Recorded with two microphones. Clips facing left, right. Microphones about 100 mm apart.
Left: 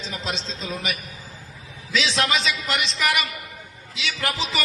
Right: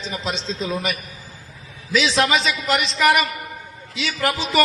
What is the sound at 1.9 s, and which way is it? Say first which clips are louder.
A man's voice: right 5 dB; 35° right (ahead or behind).